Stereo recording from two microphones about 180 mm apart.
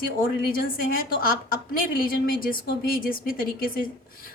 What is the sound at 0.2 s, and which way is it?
A woman's voice, 50° left (ahead or behind).